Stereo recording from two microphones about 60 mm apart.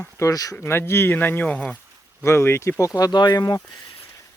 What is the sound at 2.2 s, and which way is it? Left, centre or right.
Speech, left.